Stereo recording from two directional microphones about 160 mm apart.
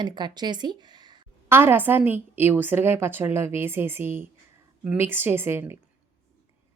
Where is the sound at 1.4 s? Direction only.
15° right (ahead or behind).